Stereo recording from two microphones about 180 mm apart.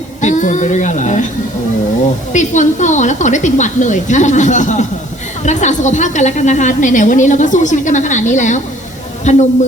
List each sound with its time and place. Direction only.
0.2 s a woman's voice: 45° left (ahead or behind)
2.3 s a woman's voice: 45° left (ahead or behind)